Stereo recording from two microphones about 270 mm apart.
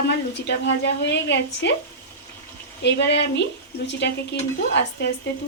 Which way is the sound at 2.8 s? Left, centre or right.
Left.